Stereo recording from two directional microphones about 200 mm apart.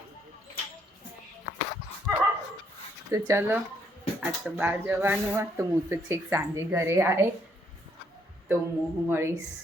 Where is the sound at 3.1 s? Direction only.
15° right (ahead or behind).